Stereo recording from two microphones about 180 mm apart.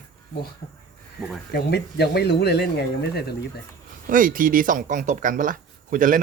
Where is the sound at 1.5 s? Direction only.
65° left (ahead or behind).